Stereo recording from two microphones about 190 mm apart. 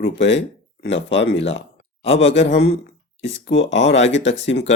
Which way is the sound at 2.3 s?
70° left (ahead or behind).